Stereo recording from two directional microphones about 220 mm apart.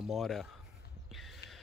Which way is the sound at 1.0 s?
Centre (ahead or behind).